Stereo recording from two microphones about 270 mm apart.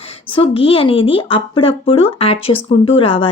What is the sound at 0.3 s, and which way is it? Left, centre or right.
Speech, centre.